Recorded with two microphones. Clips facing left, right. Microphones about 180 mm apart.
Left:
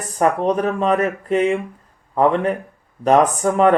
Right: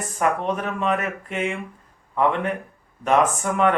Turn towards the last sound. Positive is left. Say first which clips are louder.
# left 5 dB
turn(degrees=35)  # may be behind; listen again after turning